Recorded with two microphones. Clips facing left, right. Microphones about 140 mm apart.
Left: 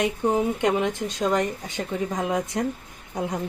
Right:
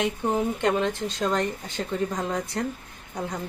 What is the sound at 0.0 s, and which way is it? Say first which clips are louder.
A woman's voice: left 2 dB; 15° left (ahead or behind).